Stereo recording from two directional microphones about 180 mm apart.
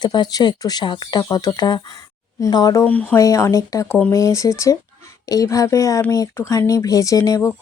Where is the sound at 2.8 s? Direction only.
10° left (ahead or behind).